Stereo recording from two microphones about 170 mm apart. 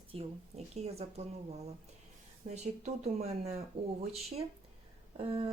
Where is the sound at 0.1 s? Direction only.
35° right (ahead or behind).